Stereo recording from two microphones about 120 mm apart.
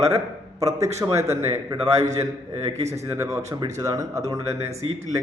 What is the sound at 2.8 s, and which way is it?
Speech, 65° right (ahead or behind).